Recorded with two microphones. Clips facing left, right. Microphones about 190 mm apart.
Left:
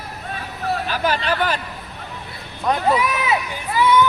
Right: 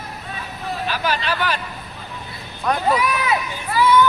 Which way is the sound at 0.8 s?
50° left (ahead or behind).